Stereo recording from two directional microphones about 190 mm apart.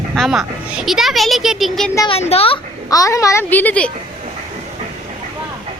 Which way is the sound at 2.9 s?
15° left (ahead or behind).